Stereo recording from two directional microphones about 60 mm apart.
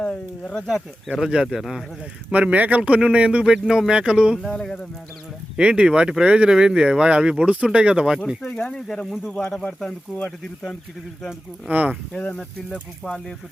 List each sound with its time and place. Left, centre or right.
0.1 s speech: centre
0.7 s speech: centre
2.3 s speech: right
4.5 s speech: centre
5.5 s speech: centre
8.4 s speech: centre
11.7 s speech: right
12.1 s speech: centre